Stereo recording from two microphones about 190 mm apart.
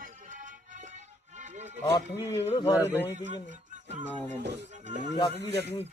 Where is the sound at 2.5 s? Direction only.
25° left (ahead or behind).